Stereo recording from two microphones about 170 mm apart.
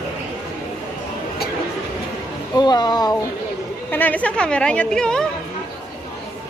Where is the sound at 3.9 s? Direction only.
10° left (ahead or behind).